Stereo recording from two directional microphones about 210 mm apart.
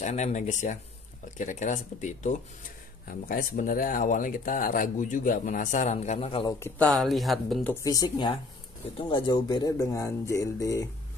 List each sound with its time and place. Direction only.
0.0 s speech: 35° left (ahead or behind)
6.6 s speech: 5° left (ahead or behind)
7.7 s speech: 15° left (ahead or behind)